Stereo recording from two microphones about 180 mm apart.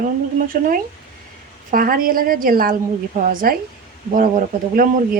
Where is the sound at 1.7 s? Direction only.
55° right (ahead or behind).